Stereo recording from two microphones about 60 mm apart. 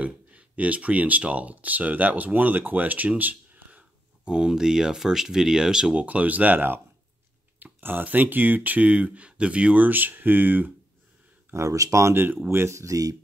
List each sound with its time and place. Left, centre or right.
0.3 s speech: right
4.2 s speech: centre
6.0 s speech: right
11.5 s speech: right
12.4 s speech: right